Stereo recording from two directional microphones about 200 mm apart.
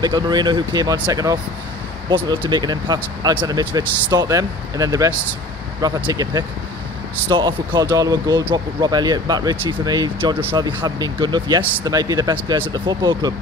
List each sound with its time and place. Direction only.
0.0 s speech: 20° right (ahead or behind)
7.2 s speech: 20° right (ahead or behind)